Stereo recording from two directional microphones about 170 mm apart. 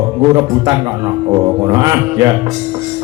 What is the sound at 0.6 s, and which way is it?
A man's voice, 20° right (ahead or behind).